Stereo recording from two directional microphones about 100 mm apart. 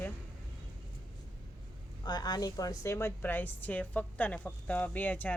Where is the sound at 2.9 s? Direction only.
20° left (ahead or behind).